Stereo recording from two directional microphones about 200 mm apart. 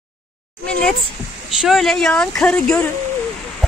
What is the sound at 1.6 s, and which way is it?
Speech, centre (ahead or behind).